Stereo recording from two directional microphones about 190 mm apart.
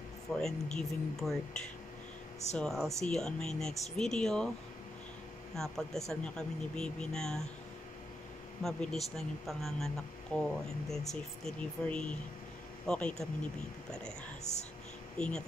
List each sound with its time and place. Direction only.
0.4 s speech: centre (ahead or behind)
2.5 s speech: 5° left (ahead or behind)
5.6 s speech: centre (ahead or behind)
8.6 s speech: centre (ahead or behind)
14.5 s speech: 35° left (ahead or behind)
15.1 s speech: 5° left (ahead or behind)